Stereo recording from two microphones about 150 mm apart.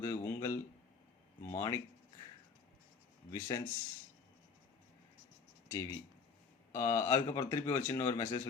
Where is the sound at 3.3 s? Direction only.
25° left (ahead or behind).